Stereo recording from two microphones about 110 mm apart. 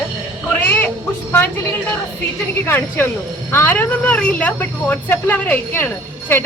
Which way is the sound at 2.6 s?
20° left (ahead or behind).